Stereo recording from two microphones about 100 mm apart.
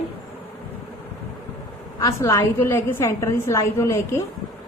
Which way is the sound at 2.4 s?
20° left (ahead or behind).